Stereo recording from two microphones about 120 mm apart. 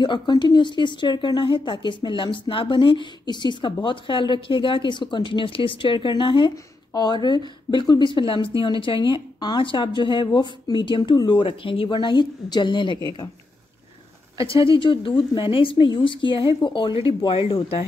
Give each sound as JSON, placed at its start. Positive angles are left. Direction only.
{"t": 0.0, "sound": "a woman's voice", "side_deg": 40}
{"t": 6.5, "sound": "speech", "side_deg": 35}
{"t": 14.4, "sound": "a woman's voice", "side_deg": 45}